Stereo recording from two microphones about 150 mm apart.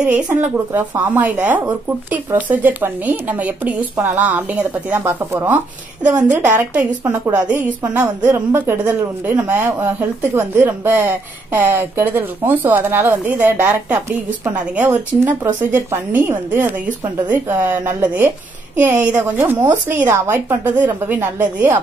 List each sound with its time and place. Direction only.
0.0 s speech: 10° right (ahead or behind)